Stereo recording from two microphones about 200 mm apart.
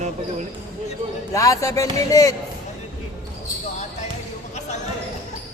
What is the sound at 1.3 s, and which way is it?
Music, 15° left (ahead or behind).